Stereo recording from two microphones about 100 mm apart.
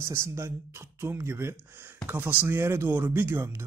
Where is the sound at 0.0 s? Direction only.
30° right (ahead or behind).